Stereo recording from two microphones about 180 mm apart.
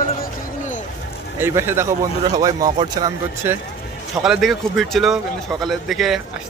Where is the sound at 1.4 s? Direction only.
15° right (ahead or behind).